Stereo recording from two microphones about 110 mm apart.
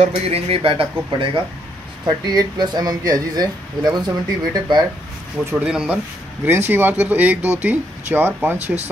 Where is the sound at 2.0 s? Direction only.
40° right (ahead or behind).